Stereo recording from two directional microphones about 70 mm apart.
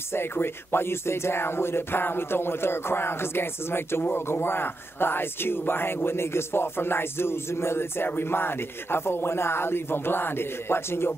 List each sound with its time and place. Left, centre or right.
0.1 s speech: left